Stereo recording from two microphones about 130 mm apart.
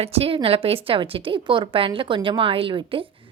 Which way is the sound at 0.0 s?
50° right (ahead or behind).